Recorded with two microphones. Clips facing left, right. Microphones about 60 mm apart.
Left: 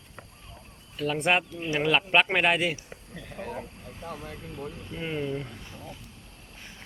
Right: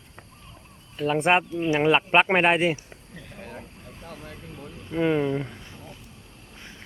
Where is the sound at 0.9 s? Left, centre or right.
Right.